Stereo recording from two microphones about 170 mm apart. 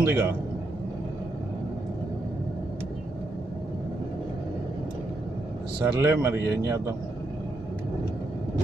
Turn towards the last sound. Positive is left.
turn(degrees=-15)  # may be behind; listen again after turning